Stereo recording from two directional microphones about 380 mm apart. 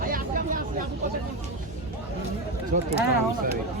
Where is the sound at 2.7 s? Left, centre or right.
Right.